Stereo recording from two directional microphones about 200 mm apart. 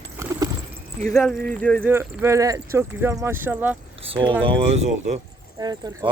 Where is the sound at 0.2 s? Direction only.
15° right (ahead or behind).